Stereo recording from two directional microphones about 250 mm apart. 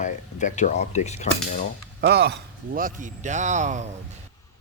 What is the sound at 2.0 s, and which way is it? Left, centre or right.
A man's voice, right.